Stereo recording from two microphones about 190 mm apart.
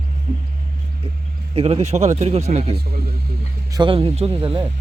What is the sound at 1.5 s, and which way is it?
Speech, 30° right (ahead or behind).